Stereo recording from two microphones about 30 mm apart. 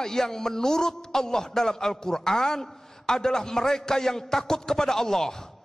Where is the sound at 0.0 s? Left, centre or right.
Centre.